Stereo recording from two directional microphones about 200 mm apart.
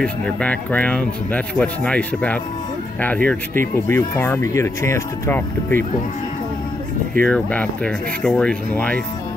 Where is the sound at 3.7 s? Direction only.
10° left (ahead or behind).